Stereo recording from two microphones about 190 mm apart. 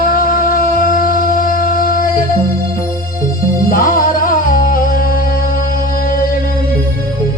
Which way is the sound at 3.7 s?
50° left (ahead or behind).